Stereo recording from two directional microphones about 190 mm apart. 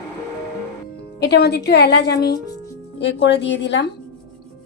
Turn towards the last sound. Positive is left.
turn(degrees=65)  # may be behind; listen again after turning